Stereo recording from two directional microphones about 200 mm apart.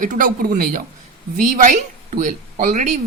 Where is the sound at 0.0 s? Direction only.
40° right (ahead or behind).